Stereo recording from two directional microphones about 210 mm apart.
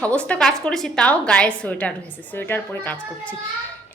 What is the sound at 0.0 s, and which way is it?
A woman's voice, 5° left (ahead or behind).